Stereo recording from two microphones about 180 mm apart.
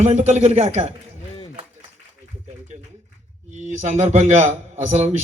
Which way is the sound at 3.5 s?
40° right (ahead or behind).